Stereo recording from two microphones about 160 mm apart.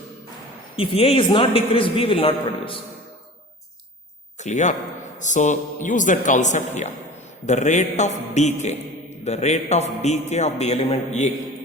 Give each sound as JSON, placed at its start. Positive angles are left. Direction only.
{"t": 0.8, "sound": "a man's voice", "side_deg": 35}
{"t": 4.4, "sound": "a man's voice", "side_deg": 50}